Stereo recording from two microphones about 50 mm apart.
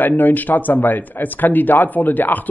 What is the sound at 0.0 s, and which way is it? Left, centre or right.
Speech, left.